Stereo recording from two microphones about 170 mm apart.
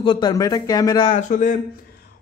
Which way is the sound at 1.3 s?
50° left (ahead or behind).